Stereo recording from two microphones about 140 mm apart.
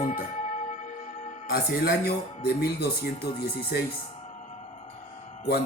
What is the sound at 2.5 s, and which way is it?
Speech, 90° left.